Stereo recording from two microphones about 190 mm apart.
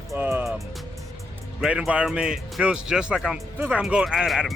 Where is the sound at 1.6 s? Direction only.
5° right (ahead or behind).